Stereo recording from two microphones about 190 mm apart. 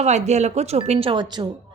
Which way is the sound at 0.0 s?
35° right (ahead or behind).